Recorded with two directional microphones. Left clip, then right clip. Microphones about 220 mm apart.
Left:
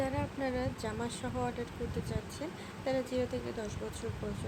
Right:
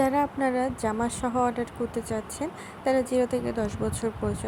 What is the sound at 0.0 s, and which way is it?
Speech, 30° right (ahead or behind).